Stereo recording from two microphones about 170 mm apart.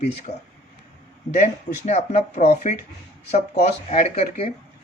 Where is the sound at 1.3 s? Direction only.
45° left (ahead or behind).